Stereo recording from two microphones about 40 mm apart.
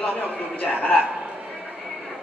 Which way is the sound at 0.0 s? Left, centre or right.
Left.